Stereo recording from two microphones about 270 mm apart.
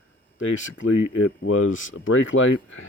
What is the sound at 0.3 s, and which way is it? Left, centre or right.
Speech, left.